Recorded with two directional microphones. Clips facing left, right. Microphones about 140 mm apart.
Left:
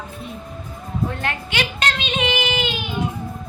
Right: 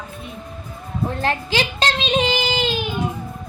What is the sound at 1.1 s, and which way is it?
Child singing, 30° right (ahead or behind).